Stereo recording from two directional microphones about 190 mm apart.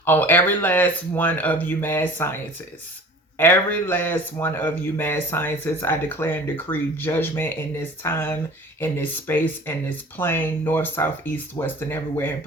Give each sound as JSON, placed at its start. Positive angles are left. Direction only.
{"t": 0.0, "sound": "speech", "side_deg": 10}